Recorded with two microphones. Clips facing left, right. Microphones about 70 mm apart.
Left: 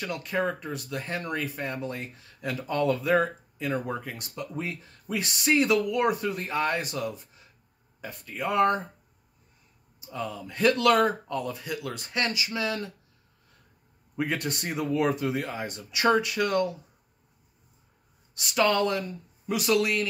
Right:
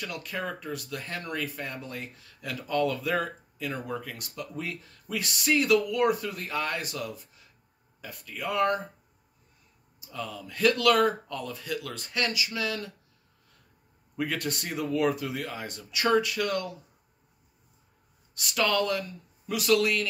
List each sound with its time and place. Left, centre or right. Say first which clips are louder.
0.0 s speech: left 6 dB; left
9.9 s speech: left 3 dB; left
14.1 s speech: left 1 dB; left
18.3 s speech: left 3 dB; left